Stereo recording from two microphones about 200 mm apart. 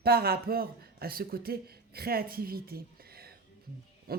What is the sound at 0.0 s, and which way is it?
A man's voice, 50° right (ahead or behind).